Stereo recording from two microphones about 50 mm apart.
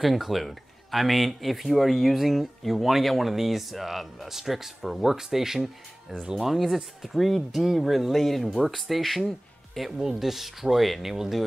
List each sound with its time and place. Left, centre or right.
0.0 s speech: centre